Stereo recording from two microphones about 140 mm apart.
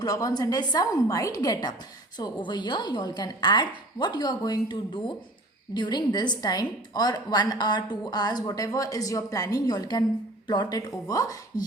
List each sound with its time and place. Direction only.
0.0 s a woman's voice: 25° left (ahead or behind)